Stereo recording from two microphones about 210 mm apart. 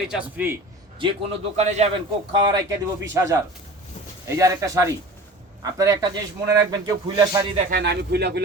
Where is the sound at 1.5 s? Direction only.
30° right (ahead or behind).